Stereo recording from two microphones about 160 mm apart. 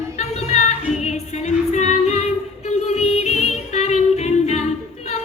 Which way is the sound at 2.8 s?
40° left (ahead or behind).